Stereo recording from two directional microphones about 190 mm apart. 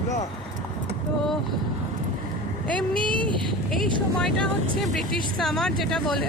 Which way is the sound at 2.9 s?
25° right (ahead or behind).